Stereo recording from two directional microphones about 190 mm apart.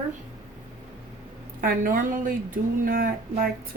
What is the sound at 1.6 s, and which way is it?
Speech, 45° right (ahead or behind).